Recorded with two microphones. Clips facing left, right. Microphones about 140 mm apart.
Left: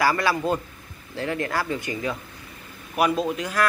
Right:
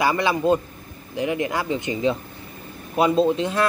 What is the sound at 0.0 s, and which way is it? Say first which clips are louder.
Speech: right 2 dB; 20° right (ahead or behind).